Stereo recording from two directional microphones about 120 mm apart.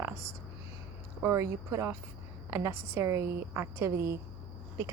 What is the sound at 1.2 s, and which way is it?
A woman's voice, 25° right (ahead or behind).